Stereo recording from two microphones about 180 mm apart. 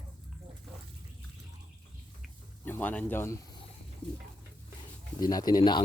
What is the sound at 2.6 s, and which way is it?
Speech, 10° left (ahead or behind).